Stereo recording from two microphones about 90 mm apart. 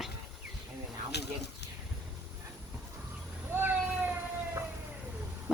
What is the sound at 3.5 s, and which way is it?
Vehicle, 25° right (ahead or behind).